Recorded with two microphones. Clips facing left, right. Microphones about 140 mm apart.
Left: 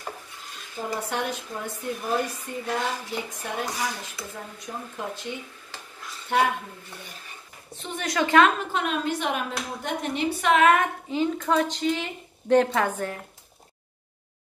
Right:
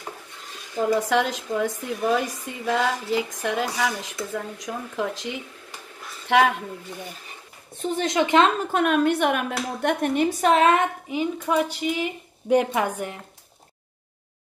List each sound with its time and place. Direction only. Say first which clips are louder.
0.7 s a woman's voice: right 8 dB; 90° right
7.9 s a woman's voice: right 1 dB; 25° right (ahead or behind)
8.7 s a woman's voice: right 7 dB; 55° right (ahead or behind); by 10.9 s 30° right (ahead or behind)
11.1 s a woman's voice: even; 10° right (ahead or behind)